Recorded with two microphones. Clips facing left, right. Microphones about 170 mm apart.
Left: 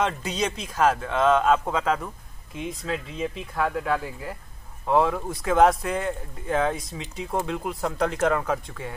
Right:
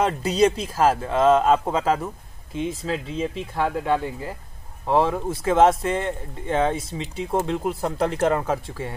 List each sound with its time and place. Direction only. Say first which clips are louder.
0.0 s speech: right 7 dB; 35° right (ahead or behind)
4.0 s speech: right 4 dB; centre (ahead or behind)
4.8 s speech: right 1 dB; 30° right (ahead or behind)